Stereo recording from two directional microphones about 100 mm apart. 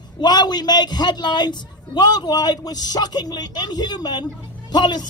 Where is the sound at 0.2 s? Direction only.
45° left (ahead or behind).